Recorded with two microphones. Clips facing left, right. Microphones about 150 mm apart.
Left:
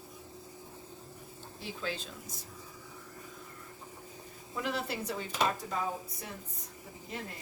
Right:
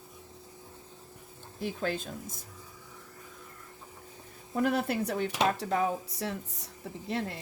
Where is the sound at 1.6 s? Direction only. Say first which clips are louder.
Right 6 dB; 50° right (ahead or behind).